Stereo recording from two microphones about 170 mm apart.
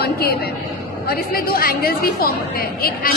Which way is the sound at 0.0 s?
65° left (ahead or behind).